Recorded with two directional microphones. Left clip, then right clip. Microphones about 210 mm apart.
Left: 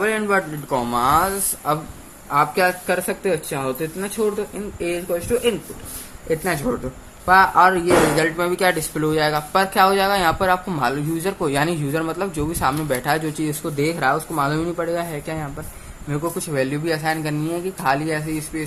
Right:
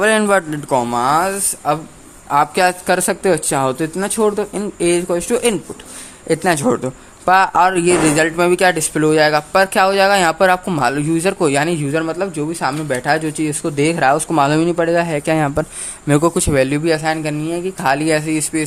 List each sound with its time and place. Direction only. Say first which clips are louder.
0.0 s speech: right 6 dB; 55° right (ahead or behind)
0.7 s speech: right 3 dB; 25° right (ahead or behind)
2.3 s speech: right 4 dB; 40° right (ahead or behind)
16.4 s speech: right 7 dB; 35° right (ahead or behind)